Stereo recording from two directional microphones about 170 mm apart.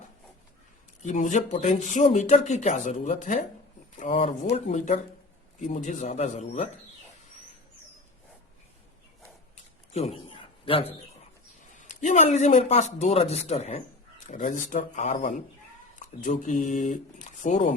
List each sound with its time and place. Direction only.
1.0 s speech: 45° left (ahead or behind)
9.9 s a sound: 40° left (ahead or behind)
11.7 s speech: 45° left (ahead or behind)